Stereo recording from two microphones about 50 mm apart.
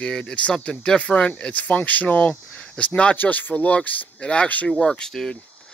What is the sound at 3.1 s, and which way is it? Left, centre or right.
Speech, left.